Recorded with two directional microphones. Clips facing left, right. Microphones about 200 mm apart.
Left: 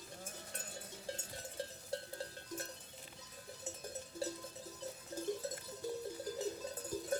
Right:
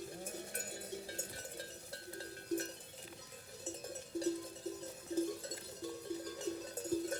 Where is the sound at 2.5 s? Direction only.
65° right (ahead or behind).